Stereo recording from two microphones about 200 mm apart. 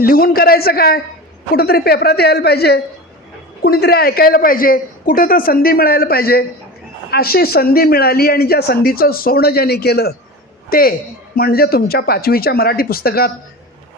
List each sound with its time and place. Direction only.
0.0 s speech: 45° left (ahead or behind)